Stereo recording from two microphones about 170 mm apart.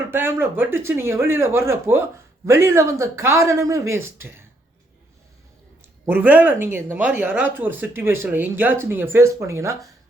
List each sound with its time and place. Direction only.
0.1 s speech: 15° right (ahead or behind)
6.1 s speech: 10° right (ahead or behind)